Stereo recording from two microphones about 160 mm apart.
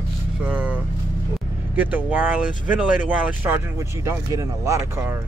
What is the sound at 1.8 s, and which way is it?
Speech, 10° right (ahead or behind).